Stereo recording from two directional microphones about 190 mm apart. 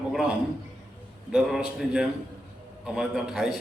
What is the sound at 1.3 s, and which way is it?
A man's voice, 5° right (ahead or behind).